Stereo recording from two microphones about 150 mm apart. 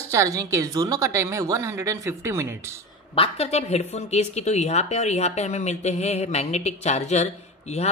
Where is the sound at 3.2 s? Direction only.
45° left (ahead or behind).